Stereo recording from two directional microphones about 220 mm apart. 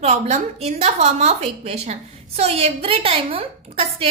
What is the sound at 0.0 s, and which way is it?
A woman's voice, 30° right (ahead or behind).